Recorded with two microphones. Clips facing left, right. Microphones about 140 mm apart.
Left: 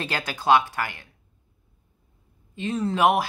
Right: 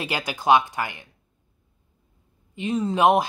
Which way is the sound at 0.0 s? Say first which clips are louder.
Right 1 dB; 15° right (ahead or behind).